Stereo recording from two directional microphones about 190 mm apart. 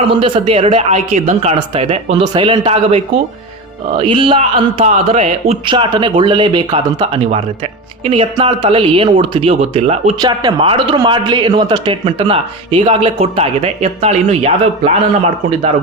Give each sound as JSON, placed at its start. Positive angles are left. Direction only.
{"t": 0.1, "sound": "speech", "side_deg": -25}
{"t": 10.2, "sound": "speech", "side_deg": -25}